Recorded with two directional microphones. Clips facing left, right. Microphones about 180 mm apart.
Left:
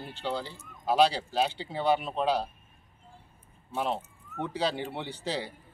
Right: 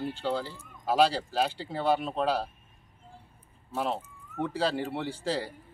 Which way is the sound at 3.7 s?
5° right (ahead or behind).